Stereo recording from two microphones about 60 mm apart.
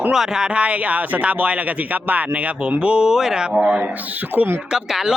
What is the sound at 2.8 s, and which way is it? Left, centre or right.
Speech, centre.